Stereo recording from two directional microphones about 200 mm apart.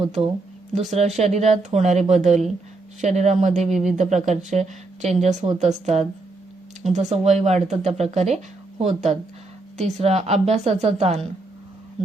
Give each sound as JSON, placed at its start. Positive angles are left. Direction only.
{"t": 0.7, "sound": "speech", "side_deg": -35}
{"t": 3.7, "sound": "speech", "side_deg": 0}
{"t": 3.9, "sound": "speech", "side_deg": -35}